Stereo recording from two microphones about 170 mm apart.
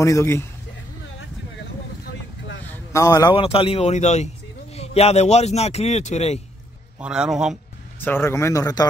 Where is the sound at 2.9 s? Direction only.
20° left (ahead or behind).